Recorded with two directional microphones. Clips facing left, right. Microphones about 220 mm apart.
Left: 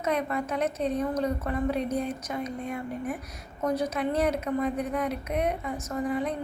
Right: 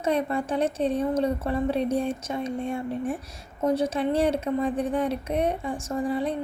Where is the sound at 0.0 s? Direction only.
30° right (ahead or behind).